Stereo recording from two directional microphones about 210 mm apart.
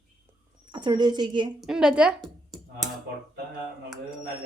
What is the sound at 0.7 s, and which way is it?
Speech, 20° right (ahead or behind).